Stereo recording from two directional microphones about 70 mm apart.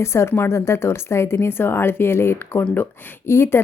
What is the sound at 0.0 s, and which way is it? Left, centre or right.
Speech, left.